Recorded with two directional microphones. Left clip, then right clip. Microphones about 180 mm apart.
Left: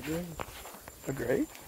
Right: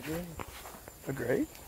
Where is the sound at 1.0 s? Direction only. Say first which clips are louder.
Left 1 dB; centre (ahead or behind).